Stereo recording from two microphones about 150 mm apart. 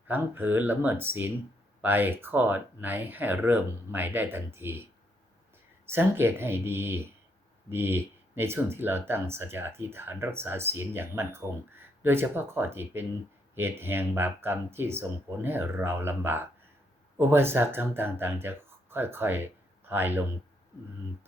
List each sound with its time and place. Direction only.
0.1 s speech: 15° right (ahead or behind)
5.9 s speech: 15° right (ahead or behind)